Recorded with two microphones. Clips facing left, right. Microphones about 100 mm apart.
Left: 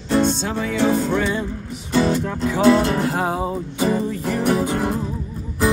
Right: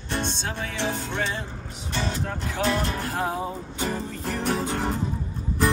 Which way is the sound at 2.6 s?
90° left.